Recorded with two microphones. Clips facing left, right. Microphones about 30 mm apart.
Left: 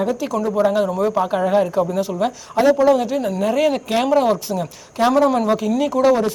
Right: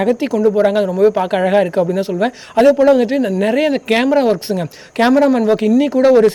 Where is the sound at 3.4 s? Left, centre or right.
Right.